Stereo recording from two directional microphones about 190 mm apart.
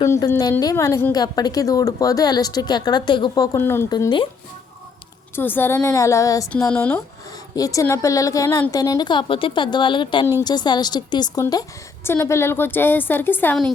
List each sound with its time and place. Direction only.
0.0 s a woman's voice: 15° left (ahead or behind)
5.3 s a woman's voice: 10° left (ahead or behind)